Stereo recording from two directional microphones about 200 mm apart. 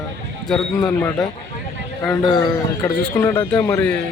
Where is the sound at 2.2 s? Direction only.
25° left (ahead or behind).